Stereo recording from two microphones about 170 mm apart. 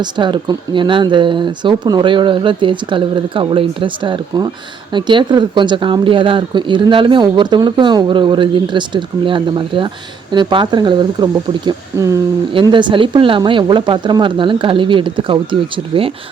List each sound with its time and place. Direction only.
0.0 s speech: 25° right (ahead or behind)
12.5 s speech: 30° right (ahead or behind)